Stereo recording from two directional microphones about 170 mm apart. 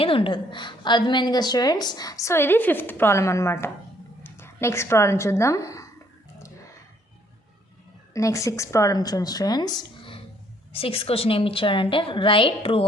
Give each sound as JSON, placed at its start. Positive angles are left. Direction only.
{"t": 0.0, "sound": "a woman's voice", "side_deg": 30}
{"t": 8.1, "sound": "a woman's voice", "side_deg": 20}